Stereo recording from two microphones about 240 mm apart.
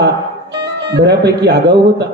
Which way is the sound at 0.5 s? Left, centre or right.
Right.